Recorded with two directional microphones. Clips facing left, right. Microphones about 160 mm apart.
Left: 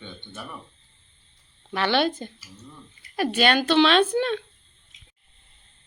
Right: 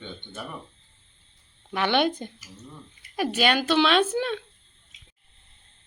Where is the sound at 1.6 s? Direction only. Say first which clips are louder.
Even; 15° right (ahead or behind).